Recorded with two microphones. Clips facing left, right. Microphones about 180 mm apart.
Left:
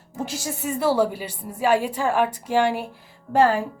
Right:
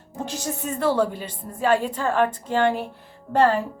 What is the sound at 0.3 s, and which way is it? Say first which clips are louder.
A woman's voice: right 1 dB; 10° left (ahead or behind).